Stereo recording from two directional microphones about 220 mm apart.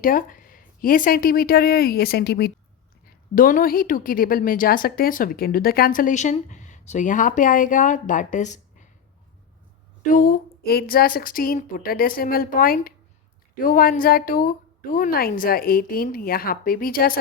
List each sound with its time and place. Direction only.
0.0 s a woman's voice: 40° left (ahead or behind)
10.0 s a woman's voice: 35° left (ahead or behind)